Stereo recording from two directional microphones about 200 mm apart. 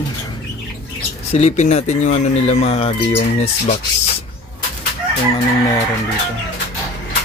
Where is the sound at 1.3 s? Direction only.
35° left (ahead or behind).